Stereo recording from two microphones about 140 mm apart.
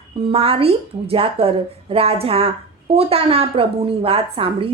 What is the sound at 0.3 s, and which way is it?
A woman's voice, 40° right (ahead or behind).